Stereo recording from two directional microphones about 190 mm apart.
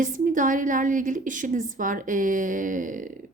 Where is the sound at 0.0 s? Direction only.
45° right (ahead or behind).